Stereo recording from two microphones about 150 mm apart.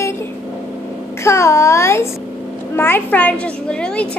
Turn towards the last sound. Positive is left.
turn(degrees=5)  # may be behind; listen again after turning